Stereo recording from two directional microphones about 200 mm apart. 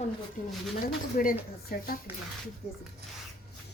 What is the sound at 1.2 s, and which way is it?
Speech, 40° left (ahead or behind).